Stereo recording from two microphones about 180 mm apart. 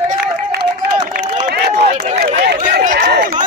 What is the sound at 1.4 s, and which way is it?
Run, 65° right (ahead or behind).